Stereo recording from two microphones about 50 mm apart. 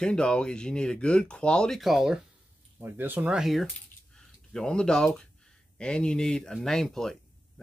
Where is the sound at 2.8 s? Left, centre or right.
Right.